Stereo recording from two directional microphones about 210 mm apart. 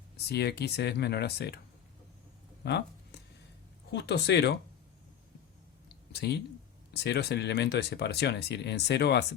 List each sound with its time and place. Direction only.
0.3 s speech: 50° left (ahead or behind)
2.6 s a sound: 50° left (ahead or behind)
3.9 s speech: 50° left (ahead or behind)
6.1 s speech: 50° left (ahead or behind)